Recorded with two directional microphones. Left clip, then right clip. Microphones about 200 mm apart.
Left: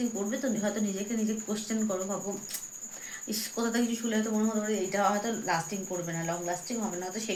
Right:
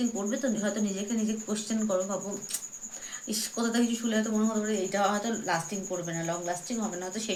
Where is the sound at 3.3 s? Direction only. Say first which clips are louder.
Right 1 dB; 15° right (ahead or behind).